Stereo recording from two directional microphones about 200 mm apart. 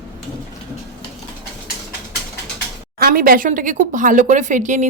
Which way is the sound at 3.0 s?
45° right (ahead or behind).